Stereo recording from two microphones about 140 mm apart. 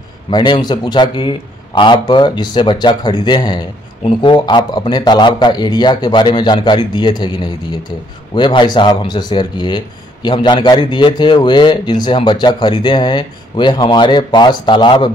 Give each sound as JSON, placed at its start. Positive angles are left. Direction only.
{"t": 0.3, "sound": "speech", "side_deg": 30}